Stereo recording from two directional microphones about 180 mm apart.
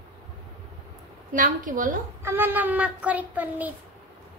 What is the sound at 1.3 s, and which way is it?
Speech, 45° right (ahead or behind).